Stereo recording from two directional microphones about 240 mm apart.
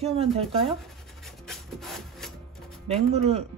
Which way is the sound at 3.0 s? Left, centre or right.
Right.